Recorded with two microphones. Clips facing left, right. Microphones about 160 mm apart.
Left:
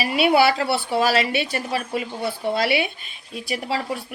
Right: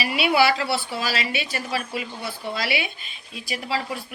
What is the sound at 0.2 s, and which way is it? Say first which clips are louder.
Speech: left 3 dB; 50° left (ahead or behind).